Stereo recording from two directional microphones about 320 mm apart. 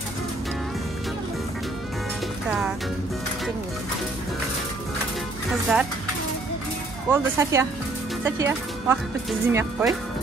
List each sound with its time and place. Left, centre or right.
5.7 s speech: centre
7.1 s speech: centre